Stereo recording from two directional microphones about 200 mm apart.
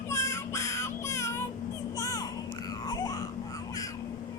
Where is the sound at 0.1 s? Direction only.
15° left (ahead or behind).